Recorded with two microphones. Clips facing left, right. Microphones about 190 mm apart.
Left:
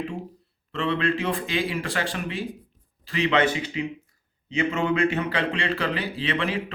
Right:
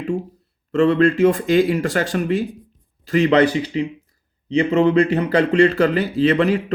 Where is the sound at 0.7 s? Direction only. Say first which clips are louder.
Right 10 dB; 45° right (ahead or behind).